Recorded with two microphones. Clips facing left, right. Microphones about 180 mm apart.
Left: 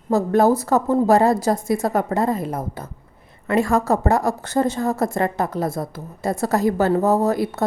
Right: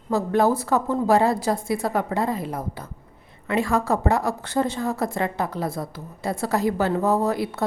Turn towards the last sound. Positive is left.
turn(degrees=45)  # may be behind; listen again after turning